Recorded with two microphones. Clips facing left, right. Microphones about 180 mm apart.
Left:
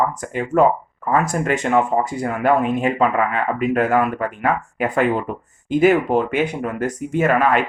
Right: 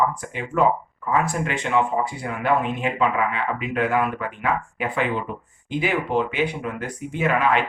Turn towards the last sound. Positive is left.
turn(degrees=45)  # may be behind; listen again after turning